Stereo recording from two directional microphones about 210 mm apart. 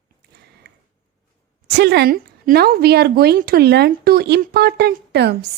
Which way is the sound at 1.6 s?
55° right (ahead or behind).